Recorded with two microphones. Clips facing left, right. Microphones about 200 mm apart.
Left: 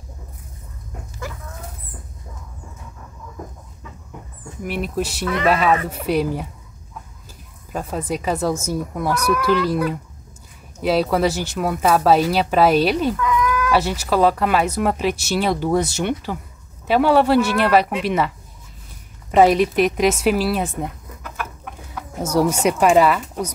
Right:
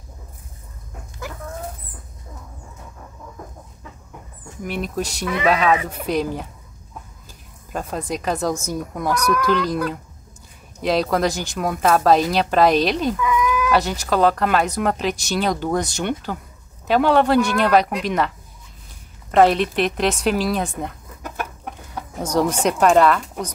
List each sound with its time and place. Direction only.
4.6 s speech: 5° left (ahead or behind)
5.2 s speech: 10° right (ahead or behind)
5.5 s speech: 5° left (ahead or behind)
7.7 s speech: 5° left (ahead or behind)
13.1 s chicken: 10° right (ahead or behind)
13.7 s speech: 5° left (ahead or behind)
19.3 s speech: 10° left (ahead or behind)
21.2 s chicken: 40° right (ahead or behind)
21.8 s speech: 5° left (ahead or behind)